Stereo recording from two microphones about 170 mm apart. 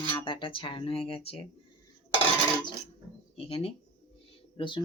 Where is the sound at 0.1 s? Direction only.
30° left (ahead or behind).